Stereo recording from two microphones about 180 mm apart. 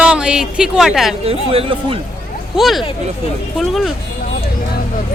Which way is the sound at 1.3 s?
30° right (ahead or behind).